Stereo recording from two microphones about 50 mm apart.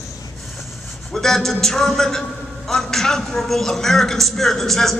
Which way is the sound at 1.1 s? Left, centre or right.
Centre.